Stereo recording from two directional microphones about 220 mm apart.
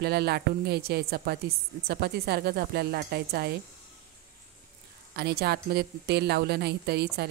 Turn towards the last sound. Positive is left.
turn(degrees=-45)  # may be behind; listen again after turning